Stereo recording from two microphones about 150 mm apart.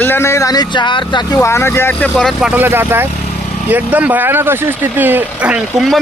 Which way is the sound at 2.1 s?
Centre (ahead or behind).